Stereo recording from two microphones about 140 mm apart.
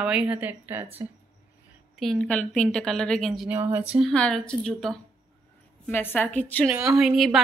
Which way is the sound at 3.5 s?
15° right (ahead or behind).